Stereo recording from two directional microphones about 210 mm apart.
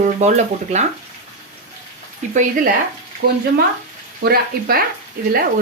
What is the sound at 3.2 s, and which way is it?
Speech, 50° right (ahead or behind).